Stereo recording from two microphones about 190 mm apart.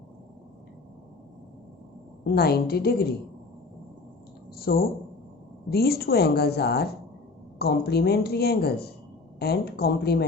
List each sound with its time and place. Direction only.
2.2 s a woman's voice: 55° left (ahead or behind)
4.5 s a sound: 50° left (ahead or behind)
5.7 s a woman's voice: 55° left (ahead or behind)